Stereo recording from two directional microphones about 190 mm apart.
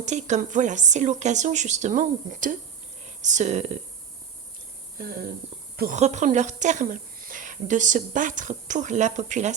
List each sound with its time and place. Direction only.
0.0 s a woman's voice: 40° right (ahead or behind)
5.7 s speech: 50° right (ahead or behind)
6.0 s a woman's voice: 35° right (ahead or behind)